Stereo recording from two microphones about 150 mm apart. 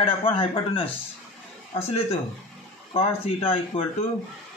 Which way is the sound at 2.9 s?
40° left (ahead or behind).